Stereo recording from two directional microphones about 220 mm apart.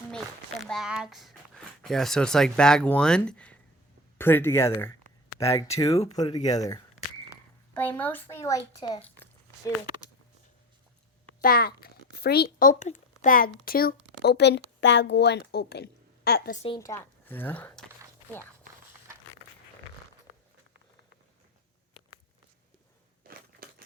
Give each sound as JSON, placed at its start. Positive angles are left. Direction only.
{"t": 0.6, "sound": "speech", "side_deg": 0}
{"t": 5.8, "sound": "a child's voice", "side_deg": 30}
{"t": 6.1, "sound": "a child's voice", "side_deg": 15}
{"t": 11.3, "sound": "a child's voice", "side_deg": 45}
{"t": 16.6, "sound": "speech", "side_deg": 15}
{"t": 23.2, "sound": "a sound", "side_deg": -40}